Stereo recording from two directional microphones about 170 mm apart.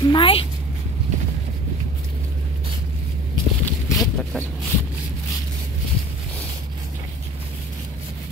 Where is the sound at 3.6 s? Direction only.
20° left (ahead or behind).